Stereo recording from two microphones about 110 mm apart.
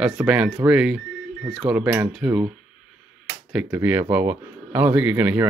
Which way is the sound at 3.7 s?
15° right (ahead or behind).